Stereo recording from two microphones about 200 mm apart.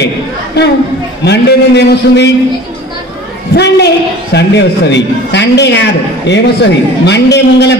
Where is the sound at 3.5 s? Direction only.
55° left (ahead or behind).